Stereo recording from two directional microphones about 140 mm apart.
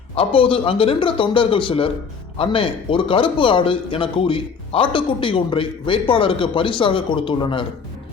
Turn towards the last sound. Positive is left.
turn(degrees=35)  # may be behind; listen again after turning